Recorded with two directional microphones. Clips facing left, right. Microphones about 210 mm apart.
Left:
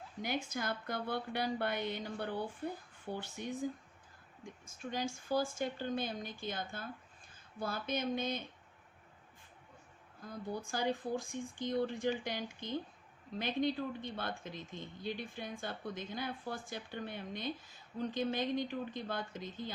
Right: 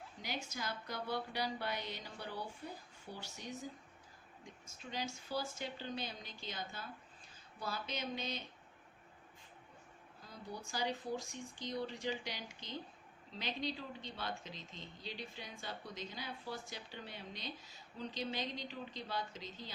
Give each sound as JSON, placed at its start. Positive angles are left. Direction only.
{"t": 0.2, "sound": "a woman's voice", "side_deg": 55}
{"t": 4.6, "sound": "speech", "side_deg": 50}
{"t": 10.2, "sound": "speech", "side_deg": 55}